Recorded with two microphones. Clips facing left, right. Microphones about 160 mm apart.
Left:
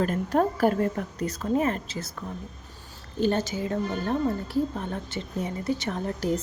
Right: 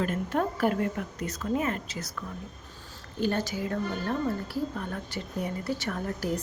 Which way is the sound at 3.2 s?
25° left (ahead or behind).